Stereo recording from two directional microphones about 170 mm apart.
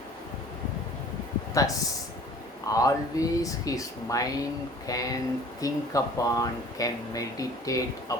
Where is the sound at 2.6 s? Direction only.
20° left (ahead or behind).